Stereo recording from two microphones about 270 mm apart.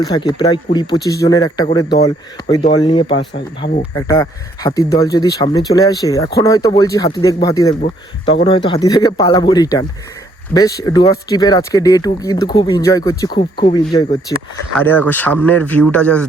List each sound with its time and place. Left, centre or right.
0.0 s speech: centre